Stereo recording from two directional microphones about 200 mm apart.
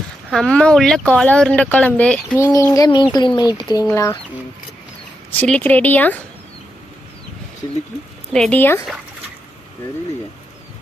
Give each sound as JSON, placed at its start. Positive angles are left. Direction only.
{"t": 0.3, "sound": "speech", "side_deg": 0}
{"t": 2.4, "sound": "child singing", "side_deg": 15}
{"t": 3.7, "sound": "speech", "side_deg": 15}
{"t": 5.4, "sound": "speech", "side_deg": 10}
{"t": 8.3, "sound": "speech", "side_deg": 5}